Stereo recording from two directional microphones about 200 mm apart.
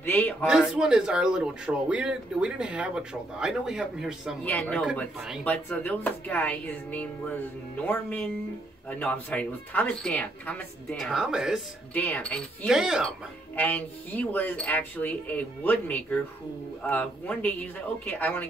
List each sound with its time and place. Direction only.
0.0 s a sound: 10° left (ahead or behind)
0.5 s speech: 5° right (ahead or behind)
11.9 s speech: 10° left (ahead or behind)
13.6 s speech: 10° left (ahead or behind)